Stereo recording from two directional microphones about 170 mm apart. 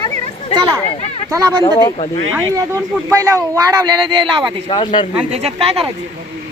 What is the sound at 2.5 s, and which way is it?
Speech, 15° right (ahead or behind).